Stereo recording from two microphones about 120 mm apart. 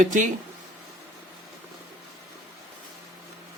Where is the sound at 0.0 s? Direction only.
90° right.